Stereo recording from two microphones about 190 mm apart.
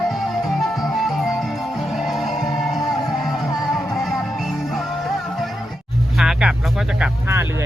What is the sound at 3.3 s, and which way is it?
Music, centre (ahead or behind).